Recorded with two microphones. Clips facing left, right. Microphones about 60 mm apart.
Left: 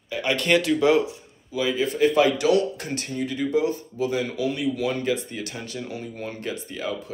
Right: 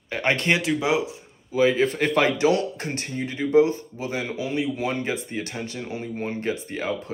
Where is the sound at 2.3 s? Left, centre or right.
Right.